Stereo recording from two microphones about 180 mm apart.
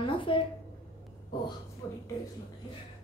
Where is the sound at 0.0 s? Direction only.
30° left (ahead or behind).